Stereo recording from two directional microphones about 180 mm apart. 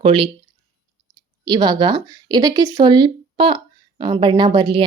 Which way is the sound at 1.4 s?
25° right (ahead or behind).